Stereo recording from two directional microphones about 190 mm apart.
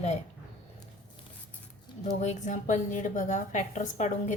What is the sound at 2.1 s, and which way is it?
A woman's voice, 40° left (ahead or behind).